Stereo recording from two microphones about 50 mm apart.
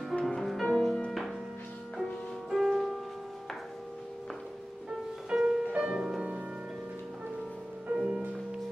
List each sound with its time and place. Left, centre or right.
0.2 s music: centre
2.5 s music: centre
5.3 s music: centre
7.9 s music: right